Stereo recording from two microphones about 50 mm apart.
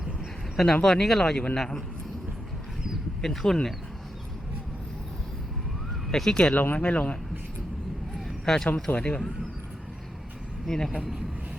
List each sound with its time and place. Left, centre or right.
0.5 s speech: centre
3.2 s speech: centre
6.1 s speech: centre
6.5 s speech: left
6.7 s speech: left
8.4 s speech: centre
9.0 s speech: left
10.7 s speech: centre